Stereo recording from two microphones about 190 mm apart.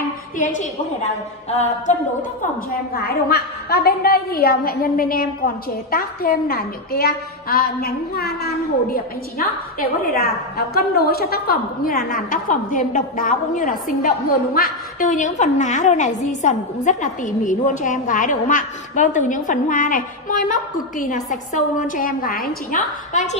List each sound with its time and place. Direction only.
0.4 s a woman's voice: 40° left (ahead or behind)
2.9 s a woman's voice: 55° left (ahead or behind)